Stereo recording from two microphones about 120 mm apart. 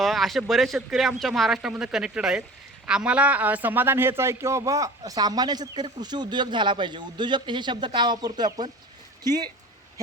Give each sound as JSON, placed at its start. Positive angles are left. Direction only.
{"t": 0.0, "sound": "a man's voice", "side_deg": 0}